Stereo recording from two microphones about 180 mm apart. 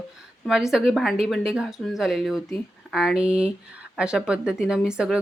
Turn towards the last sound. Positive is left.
turn(degrees=-5)  # may be behind; listen again after turning